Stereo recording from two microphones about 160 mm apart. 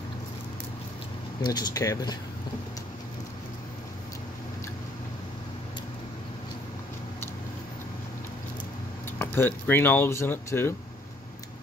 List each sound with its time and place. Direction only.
1.4 s speech: 25° left (ahead or behind)
9.2 s speech: 15° left (ahead or behind)